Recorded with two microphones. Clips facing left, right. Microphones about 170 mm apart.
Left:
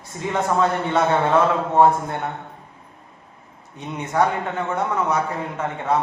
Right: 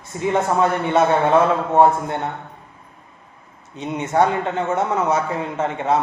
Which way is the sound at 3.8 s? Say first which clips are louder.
Right 3 dB; 20° right (ahead or behind).